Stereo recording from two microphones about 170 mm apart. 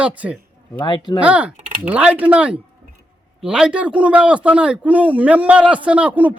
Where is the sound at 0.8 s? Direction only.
25° left (ahead or behind).